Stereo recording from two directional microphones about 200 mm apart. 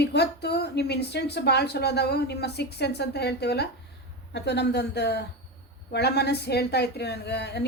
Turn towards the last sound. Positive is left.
turn(degrees=55)  # may be behind; listen again after turning